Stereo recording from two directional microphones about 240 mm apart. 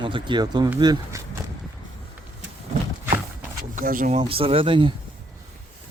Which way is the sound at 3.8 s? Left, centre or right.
Right.